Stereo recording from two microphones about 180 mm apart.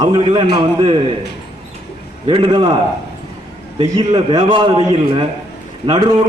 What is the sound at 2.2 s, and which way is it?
Speech, 30° right (ahead or behind).